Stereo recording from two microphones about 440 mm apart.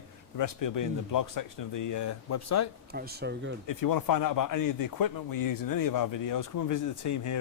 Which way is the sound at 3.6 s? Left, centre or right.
Left.